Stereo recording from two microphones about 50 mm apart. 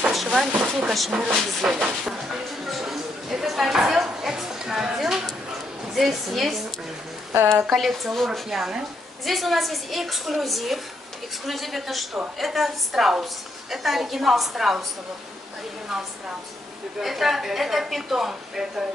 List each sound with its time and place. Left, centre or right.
0.1 s a sound: centre
0.7 s a woman's voice: centre
1.1 s speech: centre
2.2 s a sound: centre
5.9 s a woman's voice: centre
7.7 s a woman's voice: centre
8.3 s a woman's voice: centre
17.0 s a woman's voice: centre